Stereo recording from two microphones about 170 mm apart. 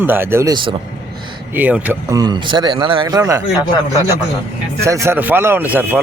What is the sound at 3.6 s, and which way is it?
Speech, 25° left (ahead or behind).